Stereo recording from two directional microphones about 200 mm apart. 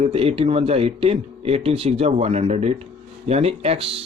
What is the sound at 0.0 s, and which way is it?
Speech, 30° right (ahead or behind).